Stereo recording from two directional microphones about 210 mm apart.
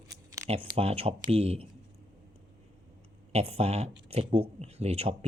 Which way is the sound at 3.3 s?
30° right (ahead or behind).